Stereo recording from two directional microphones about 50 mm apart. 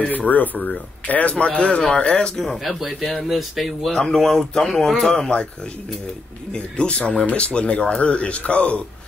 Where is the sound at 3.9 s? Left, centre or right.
Centre.